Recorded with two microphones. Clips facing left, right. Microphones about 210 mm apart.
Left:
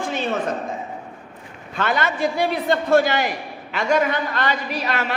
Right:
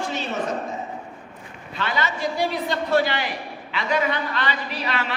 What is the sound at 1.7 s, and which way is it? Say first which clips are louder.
A man's voice: left 4 dB; 50° left (ahead or behind).